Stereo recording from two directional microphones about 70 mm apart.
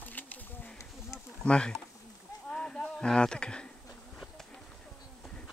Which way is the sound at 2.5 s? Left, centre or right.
Centre.